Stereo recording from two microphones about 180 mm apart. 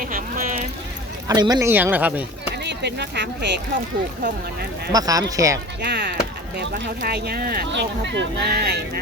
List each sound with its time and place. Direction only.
0.0 s music: 50° right (ahead or behind)
1.3 s speech: 20° right (ahead or behind)
2.6 s speech: 70° right (ahead or behind)
4.9 s speech: 20° right (ahead or behind)
5.8 s speech: 70° right (ahead or behind)